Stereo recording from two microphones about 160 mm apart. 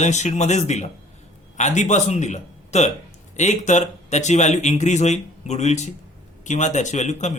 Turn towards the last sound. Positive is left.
turn(degrees=45)  # may be behind; listen again after turning